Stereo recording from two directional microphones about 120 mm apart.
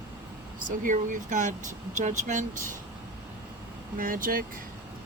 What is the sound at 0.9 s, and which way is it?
Speech, 90° right.